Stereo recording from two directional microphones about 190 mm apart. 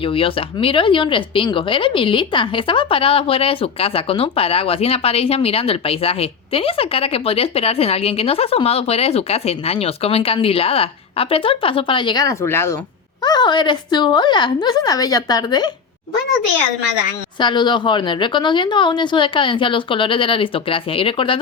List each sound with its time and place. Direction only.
0.0 s speech: 30° left (ahead or behind); by 12.7 s 10° left (ahead or behind)
13.2 s speech: 25° left (ahead or behind)
17.4 s speech: 25° left (ahead or behind)